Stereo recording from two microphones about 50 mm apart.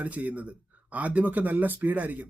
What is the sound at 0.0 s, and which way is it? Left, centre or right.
Speech, right.